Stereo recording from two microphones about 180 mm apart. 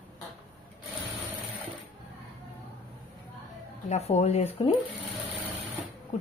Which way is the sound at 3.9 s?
35° left (ahead or behind).